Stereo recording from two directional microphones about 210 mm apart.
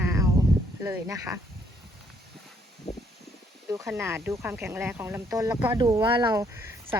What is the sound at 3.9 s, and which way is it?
Speech, 15° right (ahead or behind).